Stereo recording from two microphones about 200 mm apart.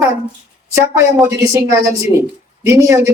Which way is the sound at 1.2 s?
15° right (ahead or behind).